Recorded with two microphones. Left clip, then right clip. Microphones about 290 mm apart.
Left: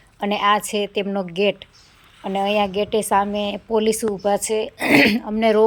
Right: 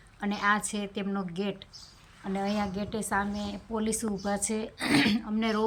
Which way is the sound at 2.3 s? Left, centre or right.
Left.